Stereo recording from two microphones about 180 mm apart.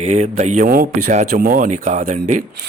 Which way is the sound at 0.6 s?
50° right (ahead or behind).